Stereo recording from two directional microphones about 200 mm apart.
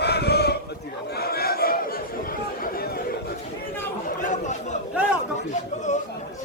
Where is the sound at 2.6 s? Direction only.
45° left (ahead or behind).